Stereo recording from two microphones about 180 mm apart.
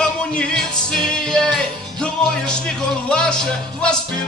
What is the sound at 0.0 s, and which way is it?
Music, 5° left (ahead or behind).